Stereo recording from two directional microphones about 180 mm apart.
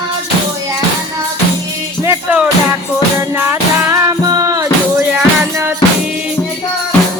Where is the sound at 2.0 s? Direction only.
10° right (ahead or behind).